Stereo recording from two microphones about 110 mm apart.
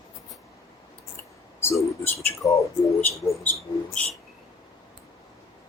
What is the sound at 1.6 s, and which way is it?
Speech, 25° left (ahead or behind).